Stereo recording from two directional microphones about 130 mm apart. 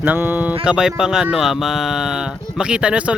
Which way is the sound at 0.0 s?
15° right (ahead or behind).